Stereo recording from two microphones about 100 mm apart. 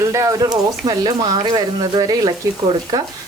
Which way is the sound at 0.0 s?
30° right (ahead or behind).